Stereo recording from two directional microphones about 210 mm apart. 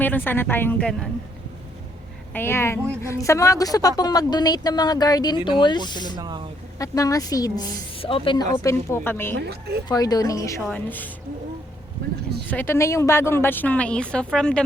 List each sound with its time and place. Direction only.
0.0 s a woman's voice: 10° left (ahead or behind)
2.3 s a woman's voice: 10° left (ahead or behind)
6.1 s speech: 20° right (ahead or behind)
6.7 s a woman's voice: 15° left (ahead or behind)
8.5 s a woman's voice: 15° left (ahead or behind)
9.4 s speech: 50° right (ahead or behind)
9.9 s a woman's voice: 15° left (ahead or behind)
12.5 s a woman's voice: 10° left (ahead or behind)